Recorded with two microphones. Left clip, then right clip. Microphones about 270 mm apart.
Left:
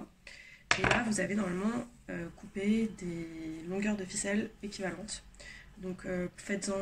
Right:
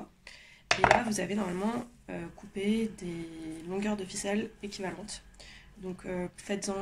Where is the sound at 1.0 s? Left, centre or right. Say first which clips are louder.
Right 1 dB; centre.